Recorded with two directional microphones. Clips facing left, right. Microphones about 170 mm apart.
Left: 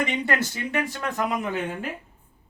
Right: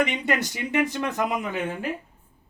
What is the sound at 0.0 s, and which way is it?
Speech, 20° right (ahead or behind).